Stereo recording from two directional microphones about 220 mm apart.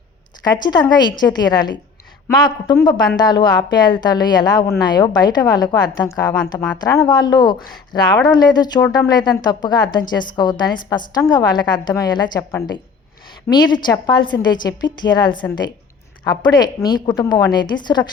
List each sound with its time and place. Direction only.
0.4 s a woman's voice: 20° left (ahead or behind)